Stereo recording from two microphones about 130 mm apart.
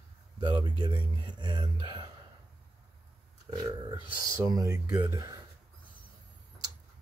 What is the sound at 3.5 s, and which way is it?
Speech, 30° right (ahead or behind).